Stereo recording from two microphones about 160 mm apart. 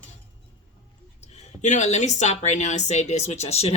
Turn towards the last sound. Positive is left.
turn(degrees=40)  # may be behind; listen again after turning